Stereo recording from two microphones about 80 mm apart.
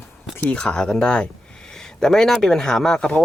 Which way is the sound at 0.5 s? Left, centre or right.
Centre.